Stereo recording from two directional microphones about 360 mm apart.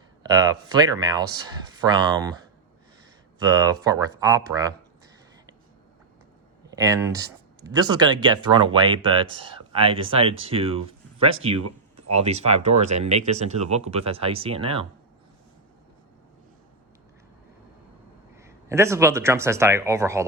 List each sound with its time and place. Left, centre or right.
0.2 s speech: centre
3.3 s speech: centre
6.7 s speech: centre
12.7 s speech: right
13.1 s speech: centre
18.3 s speech: centre